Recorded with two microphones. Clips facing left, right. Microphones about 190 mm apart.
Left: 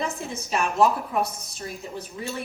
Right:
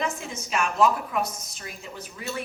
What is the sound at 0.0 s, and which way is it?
A woman's voice, 35° left (ahead or behind).